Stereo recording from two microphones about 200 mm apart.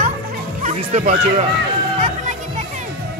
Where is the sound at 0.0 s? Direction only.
40° right (ahead or behind).